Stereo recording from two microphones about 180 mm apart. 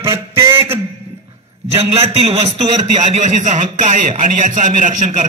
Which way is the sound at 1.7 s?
35° right (ahead or behind).